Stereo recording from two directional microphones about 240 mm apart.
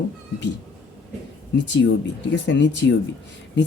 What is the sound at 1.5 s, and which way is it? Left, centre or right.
Speech, left.